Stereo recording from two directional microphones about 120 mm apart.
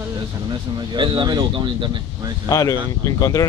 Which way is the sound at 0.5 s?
40° right (ahead or behind).